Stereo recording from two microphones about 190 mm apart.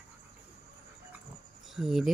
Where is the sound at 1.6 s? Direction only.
Centre (ahead or behind).